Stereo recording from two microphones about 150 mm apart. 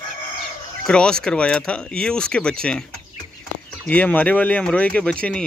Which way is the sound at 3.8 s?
10° left (ahead or behind).